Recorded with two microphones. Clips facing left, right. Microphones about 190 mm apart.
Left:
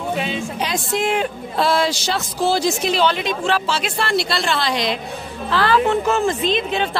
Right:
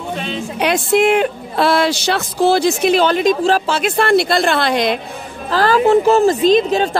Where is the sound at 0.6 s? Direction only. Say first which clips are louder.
Right 11 dB; 65° right (ahead or behind).